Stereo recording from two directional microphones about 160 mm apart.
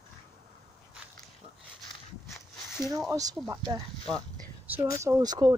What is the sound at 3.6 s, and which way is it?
Speech, 30° right (ahead or behind).